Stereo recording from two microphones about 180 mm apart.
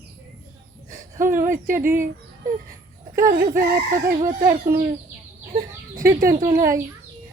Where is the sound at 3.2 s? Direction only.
55° right (ahead or behind).